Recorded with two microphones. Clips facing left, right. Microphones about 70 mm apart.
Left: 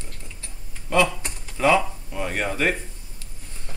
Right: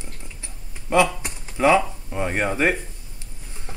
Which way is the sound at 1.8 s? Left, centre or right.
Right.